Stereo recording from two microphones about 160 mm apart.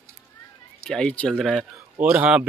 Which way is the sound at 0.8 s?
5° left (ahead or behind).